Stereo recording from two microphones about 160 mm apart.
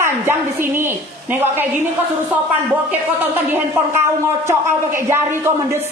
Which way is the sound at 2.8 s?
10° right (ahead or behind).